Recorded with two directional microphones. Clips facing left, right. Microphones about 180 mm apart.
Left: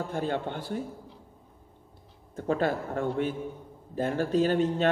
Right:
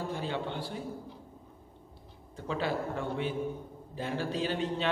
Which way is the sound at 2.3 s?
50° left (ahead or behind).